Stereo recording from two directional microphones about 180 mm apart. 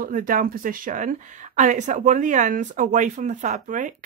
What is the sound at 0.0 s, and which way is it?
Speech, 50° right (ahead or behind).